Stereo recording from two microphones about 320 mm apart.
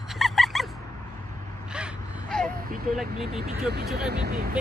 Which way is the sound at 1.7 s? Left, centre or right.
Centre.